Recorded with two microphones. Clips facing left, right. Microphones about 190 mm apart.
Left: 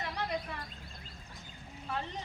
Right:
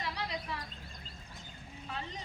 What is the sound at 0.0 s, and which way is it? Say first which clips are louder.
Chirp: left 3 dB; 50° left (ahead or behind).